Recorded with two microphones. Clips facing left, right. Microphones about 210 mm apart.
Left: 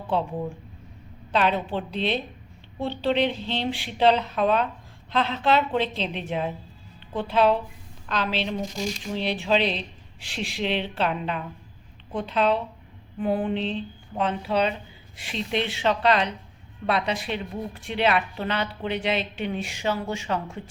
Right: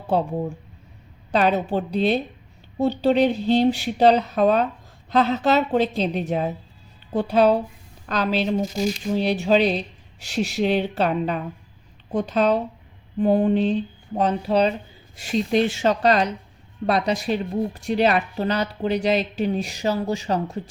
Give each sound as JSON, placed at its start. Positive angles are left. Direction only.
{"t": 0.1, "sound": "a woman's voice", "side_deg": -40}
{"t": 8.6, "sound": "speech", "side_deg": -5}
{"t": 9.0, "sound": "a woman's voice", "side_deg": -40}